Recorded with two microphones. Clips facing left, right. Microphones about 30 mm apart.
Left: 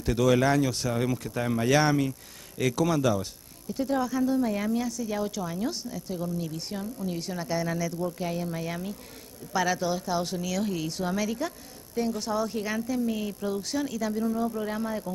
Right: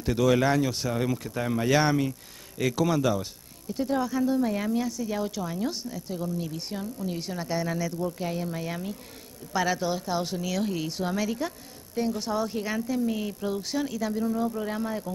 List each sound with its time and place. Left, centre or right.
0.0 s a woman's voice: centre